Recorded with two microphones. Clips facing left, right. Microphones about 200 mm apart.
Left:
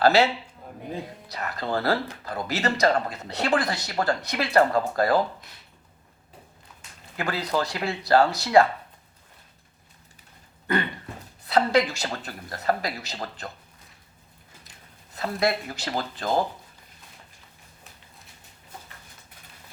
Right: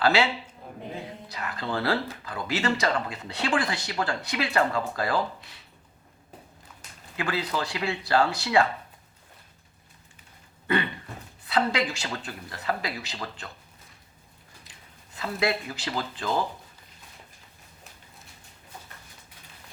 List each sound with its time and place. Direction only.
0.0 s speech: 40° left (ahead or behind)
1.3 s speech: 40° left (ahead or behind)
7.2 s speech: 40° left (ahead or behind)
11.4 s speech: 40° left (ahead or behind)
15.1 s speech: 40° left (ahead or behind)